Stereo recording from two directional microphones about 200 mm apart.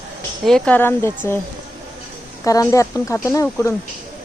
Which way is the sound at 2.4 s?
15° left (ahead or behind).